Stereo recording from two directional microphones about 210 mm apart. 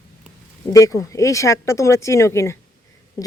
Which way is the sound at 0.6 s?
15° left (ahead or behind).